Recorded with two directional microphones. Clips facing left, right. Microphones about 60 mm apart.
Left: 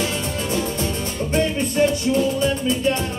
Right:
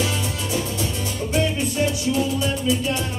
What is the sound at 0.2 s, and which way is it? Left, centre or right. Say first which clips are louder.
Music: left 2 dB; left.